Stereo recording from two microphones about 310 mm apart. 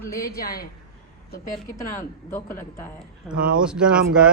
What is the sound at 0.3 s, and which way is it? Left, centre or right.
Speech, left.